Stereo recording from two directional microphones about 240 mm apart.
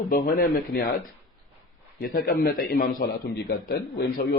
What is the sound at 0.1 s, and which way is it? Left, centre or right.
Speech, left.